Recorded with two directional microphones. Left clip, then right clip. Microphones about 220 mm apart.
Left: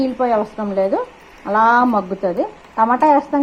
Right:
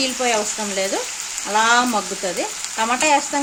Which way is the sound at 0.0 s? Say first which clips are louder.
Left 3 dB; 20° right (ahead or behind).